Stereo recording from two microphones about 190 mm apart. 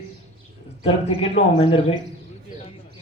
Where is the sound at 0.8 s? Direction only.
30° left (ahead or behind).